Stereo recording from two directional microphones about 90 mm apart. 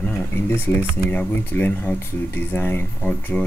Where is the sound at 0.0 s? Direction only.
25° left (ahead or behind).